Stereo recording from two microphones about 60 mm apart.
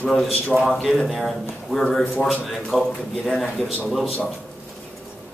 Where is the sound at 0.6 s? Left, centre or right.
Centre.